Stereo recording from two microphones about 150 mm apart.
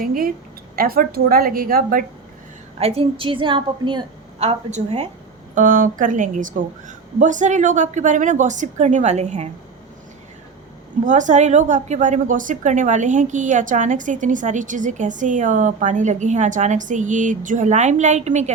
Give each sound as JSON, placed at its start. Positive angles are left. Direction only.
{"t": 0.0, "sound": "a woman's voice", "side_deg": -70}
{"t": 0.8, "sound": "a woman's voice", "side_deg": -80}
{"t": 2.7, "sound": "a woman's voice", "side_deg": -40}
{"t": 5.5, "sound": "a woman's voice", "side_deg": -65}
{"t": 11.0, "sound": "a woman's voice", "side_deg": -55}